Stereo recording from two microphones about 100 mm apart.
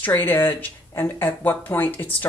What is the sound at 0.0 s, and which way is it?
Speech, 20° left (ahead or behind).